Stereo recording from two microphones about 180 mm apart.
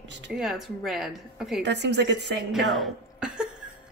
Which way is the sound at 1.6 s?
70° right (ahead or behind).